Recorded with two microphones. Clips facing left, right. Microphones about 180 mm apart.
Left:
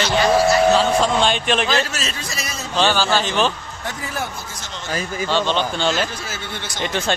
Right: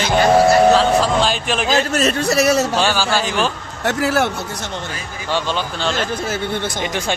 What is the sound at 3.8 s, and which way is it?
Speech, 75° right (ahead or behind).